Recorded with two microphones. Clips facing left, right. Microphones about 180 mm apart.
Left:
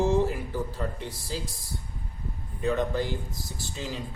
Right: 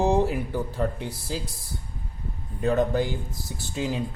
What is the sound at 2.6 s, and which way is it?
Speech, 45° right (ahead or behind).